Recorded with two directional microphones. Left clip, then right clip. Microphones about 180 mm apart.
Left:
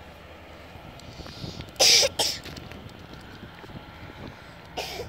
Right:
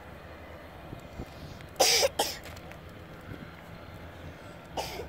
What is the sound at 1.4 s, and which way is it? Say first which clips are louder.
Cough: left 5 dB; 35° right (ahead or behind).